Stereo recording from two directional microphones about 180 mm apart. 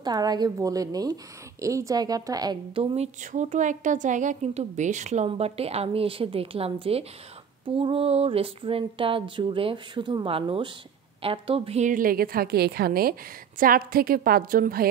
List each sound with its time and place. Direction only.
0.0 s a woman's voice: 20° right (ahead or behind); by 14.9 s 55° right (ahead or behind)